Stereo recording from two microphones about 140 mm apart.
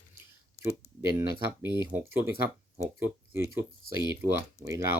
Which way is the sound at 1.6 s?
15° right (ahead or behind).